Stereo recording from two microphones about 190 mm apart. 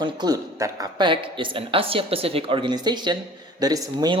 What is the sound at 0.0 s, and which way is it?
Speech, 20° right (ahead or behind).